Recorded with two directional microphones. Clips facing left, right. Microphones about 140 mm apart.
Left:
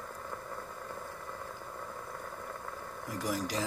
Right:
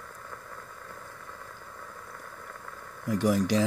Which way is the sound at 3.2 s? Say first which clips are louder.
Right 9 dB; 75° right (ahead or behind).